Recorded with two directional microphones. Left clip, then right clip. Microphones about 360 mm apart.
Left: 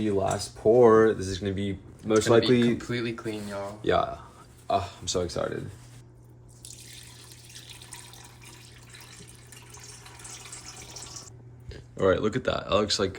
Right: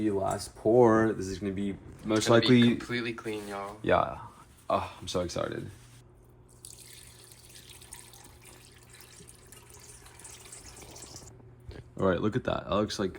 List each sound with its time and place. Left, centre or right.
0.2 s speech: centre
2.7 s speech: centre
3.8 s speech: centre
7.7 s water: centre
11.7 s speech: centre